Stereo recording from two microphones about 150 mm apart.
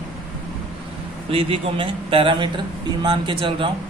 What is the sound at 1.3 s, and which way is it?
Speech, 35° right (ahead or behind).